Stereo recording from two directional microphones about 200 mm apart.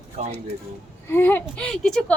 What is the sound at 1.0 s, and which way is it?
Speech, 10° left (ahead or behind).